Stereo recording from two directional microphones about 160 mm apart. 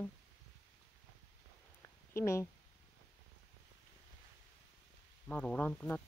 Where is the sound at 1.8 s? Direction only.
15° left (ahead or behind).